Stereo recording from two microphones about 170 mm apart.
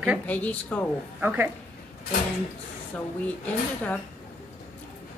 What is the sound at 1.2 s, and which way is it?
Speech, 10° right (ahead or behind).